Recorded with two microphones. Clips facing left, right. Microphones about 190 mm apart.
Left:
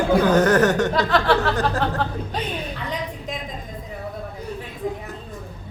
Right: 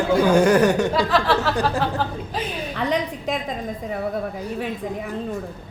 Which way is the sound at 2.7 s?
75° right (ahead or behind).